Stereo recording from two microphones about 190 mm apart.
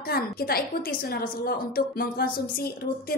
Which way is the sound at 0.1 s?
50° left (ahead or behind).